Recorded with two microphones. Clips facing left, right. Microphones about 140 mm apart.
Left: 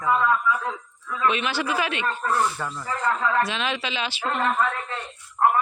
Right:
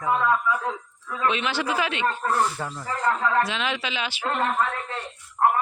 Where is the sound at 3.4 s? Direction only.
15° right (ahead or behind).